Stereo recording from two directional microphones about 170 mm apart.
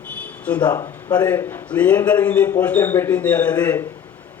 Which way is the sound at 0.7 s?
20° left (ahead or behind).